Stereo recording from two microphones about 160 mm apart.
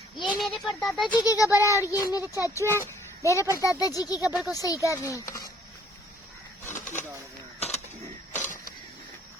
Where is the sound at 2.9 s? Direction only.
20° left (ahead or behind).